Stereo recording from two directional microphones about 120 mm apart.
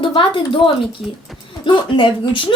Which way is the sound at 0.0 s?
45° left (ahead or behind).